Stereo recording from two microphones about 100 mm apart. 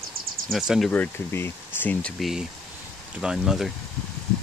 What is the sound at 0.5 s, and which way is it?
Speech, 5° right (ahead or behind).